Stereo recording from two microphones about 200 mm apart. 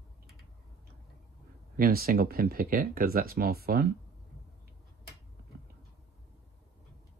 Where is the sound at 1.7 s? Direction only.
50° right (ahead or behind).